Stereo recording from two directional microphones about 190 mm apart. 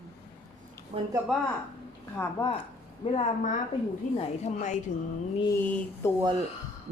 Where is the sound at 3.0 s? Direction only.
25° left (ahead or behind).